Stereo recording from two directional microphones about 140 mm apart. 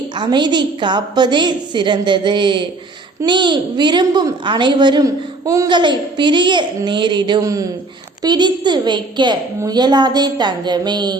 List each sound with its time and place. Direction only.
0.2 s a woman's voice: 30° right (ahead or behind)